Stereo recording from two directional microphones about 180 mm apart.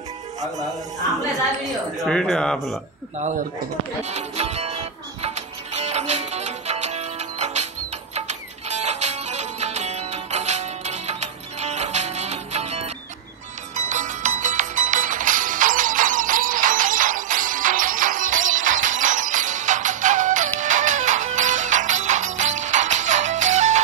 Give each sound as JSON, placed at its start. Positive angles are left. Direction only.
{"t": 1.6, "sound": "speech", "side_deg": 0}
{"t": 4.0, "sound": "music", "side_deg": -40}